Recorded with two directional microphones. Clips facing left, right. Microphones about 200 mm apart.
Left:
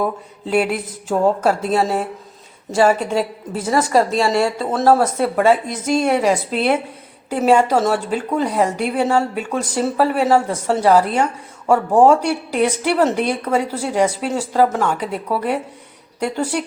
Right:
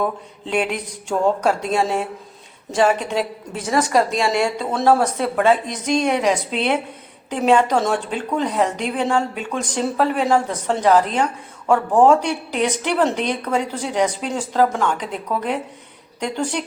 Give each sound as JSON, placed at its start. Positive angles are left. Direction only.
{"t": 0.0, "sound": "a woman's voice", "side_deg": 5}